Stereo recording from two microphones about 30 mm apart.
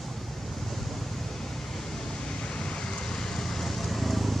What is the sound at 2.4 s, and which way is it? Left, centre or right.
Vehicle, left.